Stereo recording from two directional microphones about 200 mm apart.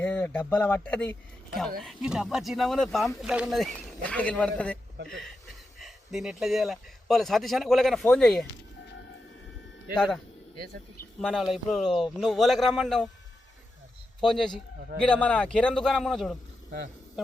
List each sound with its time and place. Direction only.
0.0 s speech: 5° left (ahead or behind)
11.2 s speech: centre (ahead or behind)
14.2 s speech: 5° left (ahead or behind)